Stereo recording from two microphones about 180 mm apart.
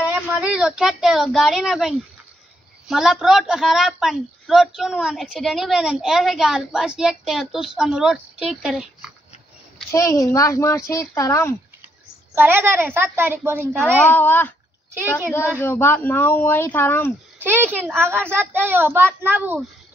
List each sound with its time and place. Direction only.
0.0 s a woman's voice: 5° right (ahead or behind)
9.8 s speech: 15° left (ahead or behind)
12.4 s a child's voice: 10° right (ahead or behind)
14.0 s speech: 10° left (ahead or behind)
15.6 s speech: 15° left (ahead or behind)
17.4 s a child's voice: 10° right (ahead or behind)